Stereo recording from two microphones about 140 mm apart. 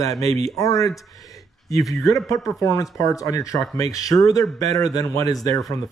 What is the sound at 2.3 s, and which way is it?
Speech, centre (ahead or behind).